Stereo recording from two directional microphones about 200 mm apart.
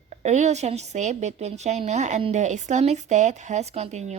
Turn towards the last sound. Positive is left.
turn(degrees=-35)  # may be behind; listen again after turning